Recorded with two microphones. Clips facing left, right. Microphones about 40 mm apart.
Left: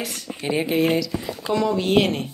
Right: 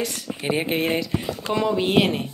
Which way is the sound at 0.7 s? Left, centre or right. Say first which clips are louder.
Left 6 dB; right.